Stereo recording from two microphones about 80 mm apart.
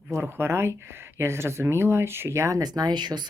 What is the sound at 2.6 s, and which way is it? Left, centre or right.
Speech, right.